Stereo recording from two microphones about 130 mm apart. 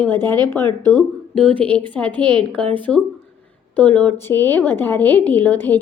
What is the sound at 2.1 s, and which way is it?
Speech, 35° right (ahead or behind).